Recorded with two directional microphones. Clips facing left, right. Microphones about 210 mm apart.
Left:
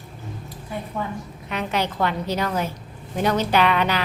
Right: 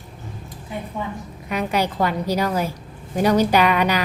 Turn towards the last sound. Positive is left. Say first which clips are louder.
# right 2 dB
turn(degrees=-10)  # may be behind; listen again after turning